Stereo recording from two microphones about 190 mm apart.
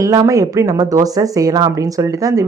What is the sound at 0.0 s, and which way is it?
Speech, 20° right (ahead or behind).